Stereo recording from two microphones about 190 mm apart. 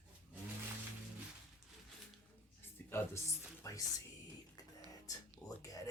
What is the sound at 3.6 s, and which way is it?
Music, 15° left (ahead or behind).